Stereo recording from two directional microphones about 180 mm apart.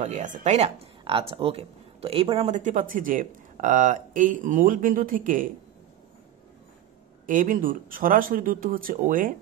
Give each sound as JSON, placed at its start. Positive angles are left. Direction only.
{"t": 0.0, "sound": "speech", "side_deg": -40}
{"t": 7.2, "sound": "speech", "side_deg": -45}